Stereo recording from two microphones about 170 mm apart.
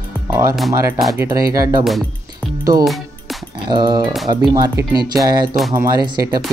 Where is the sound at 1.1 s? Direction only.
20° right (ahead or behind).